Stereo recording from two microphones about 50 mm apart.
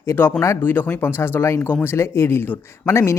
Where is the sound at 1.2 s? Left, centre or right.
Left.